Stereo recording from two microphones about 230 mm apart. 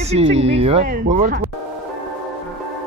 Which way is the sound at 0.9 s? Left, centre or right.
Right.